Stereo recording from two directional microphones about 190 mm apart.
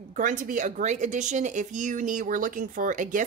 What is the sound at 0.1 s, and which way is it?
A woman's voice, 45° right (ahead or behind).